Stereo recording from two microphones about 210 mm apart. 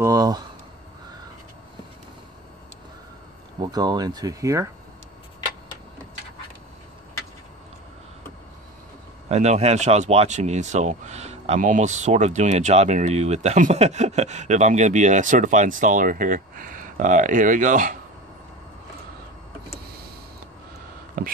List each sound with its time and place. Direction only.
0.0 s speech: 15° right (ahead or behind)
3.5 s speech: 20° right (ahead or behind)
9.3 s speech: 30° right (ahead or behind)
21.2 s speech: 40° right (ahead or behind)